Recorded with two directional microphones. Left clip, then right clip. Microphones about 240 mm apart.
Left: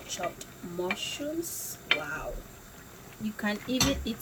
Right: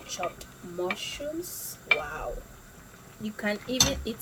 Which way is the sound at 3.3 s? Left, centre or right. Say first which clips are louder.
Right 3 dB; right.